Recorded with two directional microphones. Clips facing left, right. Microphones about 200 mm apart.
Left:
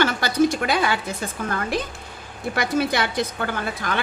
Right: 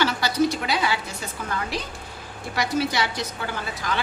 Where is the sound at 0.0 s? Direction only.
50° left (ahead or behind).